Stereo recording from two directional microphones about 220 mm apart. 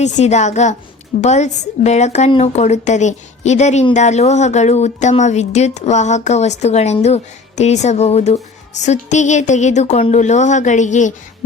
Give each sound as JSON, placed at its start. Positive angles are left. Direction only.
{"t": 0.0, "sound": "speech", "side_deg": 30}